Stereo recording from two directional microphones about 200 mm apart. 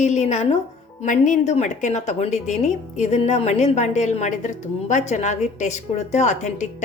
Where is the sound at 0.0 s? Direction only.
35° left (ahead or behind).